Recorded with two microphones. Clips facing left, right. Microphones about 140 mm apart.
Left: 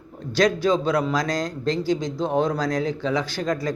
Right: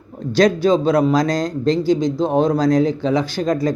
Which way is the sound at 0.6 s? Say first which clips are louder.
Right 6 dB; 20° right (ahead or behind).